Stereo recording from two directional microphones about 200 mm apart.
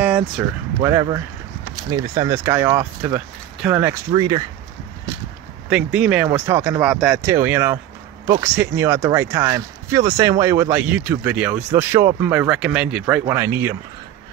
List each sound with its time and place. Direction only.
0.4 s speech: 10° right (ahead or behind)
5.7 s speech: 5° right (ahead or behind)